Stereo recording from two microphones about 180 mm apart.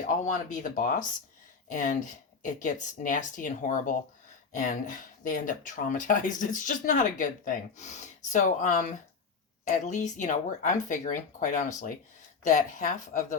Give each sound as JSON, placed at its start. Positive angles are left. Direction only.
{"t": 0.1, "sound": "speech", "side_deg": 45}
{"t": 5.2, "sound": "speech", "side_deg": 45}